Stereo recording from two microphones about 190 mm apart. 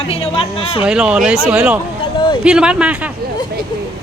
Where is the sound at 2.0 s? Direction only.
25° left (ahead or behind).